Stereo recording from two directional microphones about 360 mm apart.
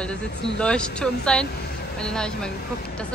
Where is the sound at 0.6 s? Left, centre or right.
Centre.